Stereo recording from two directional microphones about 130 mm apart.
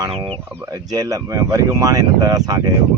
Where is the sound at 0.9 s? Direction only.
30° right (ahead or behind).